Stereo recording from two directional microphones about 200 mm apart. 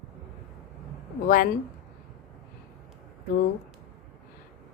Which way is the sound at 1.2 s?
45° left (ahead or behind).